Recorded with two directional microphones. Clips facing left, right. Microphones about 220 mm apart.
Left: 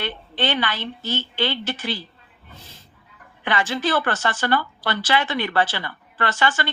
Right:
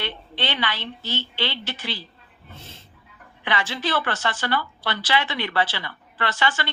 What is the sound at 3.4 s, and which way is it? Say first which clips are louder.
A woman's voice: left 4 dB; 45° left (ahead or behind).